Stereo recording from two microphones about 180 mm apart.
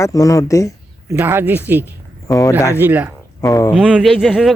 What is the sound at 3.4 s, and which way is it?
Speech, 20° left (ahead or behind).